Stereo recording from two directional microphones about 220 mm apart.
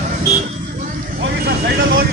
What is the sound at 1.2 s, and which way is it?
Speech, 50° right (ahead or behind).